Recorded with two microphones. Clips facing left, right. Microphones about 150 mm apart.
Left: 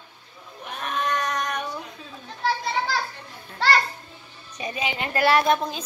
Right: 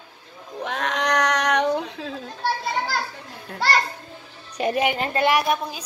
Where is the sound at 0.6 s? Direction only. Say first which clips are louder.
Right 4 dB; 90° right.